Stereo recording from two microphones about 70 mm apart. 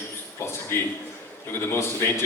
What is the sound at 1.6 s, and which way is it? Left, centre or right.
Speech, left.